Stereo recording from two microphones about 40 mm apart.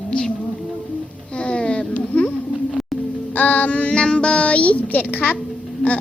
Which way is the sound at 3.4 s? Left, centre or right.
Left.